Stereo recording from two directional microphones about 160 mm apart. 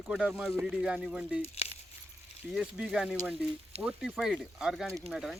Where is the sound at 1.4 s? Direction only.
40° left (ahead or behind).